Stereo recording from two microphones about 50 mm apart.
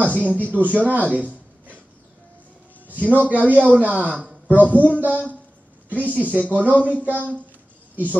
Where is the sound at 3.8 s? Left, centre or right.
Right.